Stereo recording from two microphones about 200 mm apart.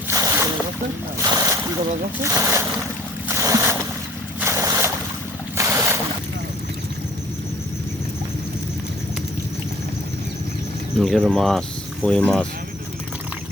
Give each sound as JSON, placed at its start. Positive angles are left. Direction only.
{"t": 0.1, "sound": "boat", "side_deg": -15}
{"t": 1.2, "sound": "speech", "side_deg": -15}
{"t": 3.2, "sound": "boat", "side_deg": -15}
{"t": 11.0, "sound": "speech", "side_deg": 0}